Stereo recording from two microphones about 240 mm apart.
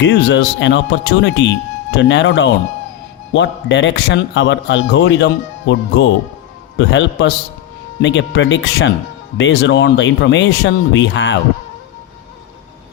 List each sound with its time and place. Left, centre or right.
0.0 s a man's voice: left